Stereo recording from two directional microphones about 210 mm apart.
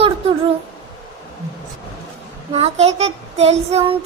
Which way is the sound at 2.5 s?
30° right (ahead or behind).